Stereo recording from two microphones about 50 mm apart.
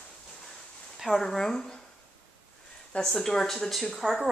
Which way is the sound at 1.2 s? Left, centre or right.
Centre.